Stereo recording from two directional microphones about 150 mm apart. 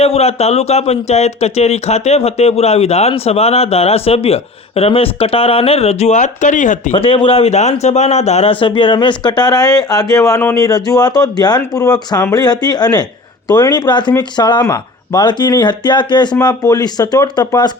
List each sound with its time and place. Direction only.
0.0 s speech: 45° left (ahead or behind)
6.9 s speech: 35° left (ahead or behind)